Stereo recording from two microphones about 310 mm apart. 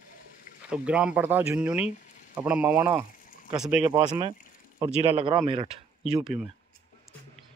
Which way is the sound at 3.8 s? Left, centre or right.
Centre.